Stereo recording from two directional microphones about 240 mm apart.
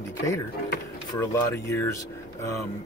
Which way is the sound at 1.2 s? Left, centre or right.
Centre.